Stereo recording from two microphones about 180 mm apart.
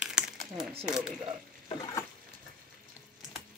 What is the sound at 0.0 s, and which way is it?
Crumpling, 5° right (ahead or behind).